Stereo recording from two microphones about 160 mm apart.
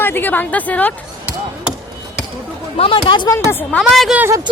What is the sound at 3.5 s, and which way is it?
Speech, 15° left (ahead or behind).